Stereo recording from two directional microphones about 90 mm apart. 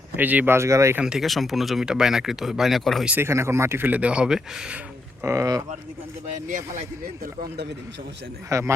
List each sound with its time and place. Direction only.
0.2 s speech: 20° right (ahead or behind)
0.5 s speech: 35° right (ahead or behind)
1.0 s speech: 5° right (ahead or behind)
3.2 s speech: 30° right (ahead or behind); by 4.8 s 10° right (ahead or behind)
5.2 s speech: 35° right (ahead or behind)
8.4 s speech: 35° right (ahead or behind)